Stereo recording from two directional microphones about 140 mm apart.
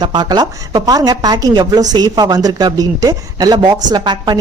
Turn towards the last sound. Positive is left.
turn(degrees=-30)  # may be behind; listen again after turning